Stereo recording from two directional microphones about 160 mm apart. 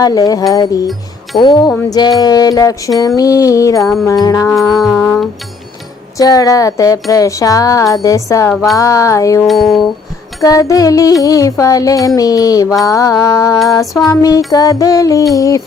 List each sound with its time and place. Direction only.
0.0 s music: 25° left (ahead or behind)
4.5 s music: centre (ahead or behind)
6.1 s music: 20° left (ahead or behind)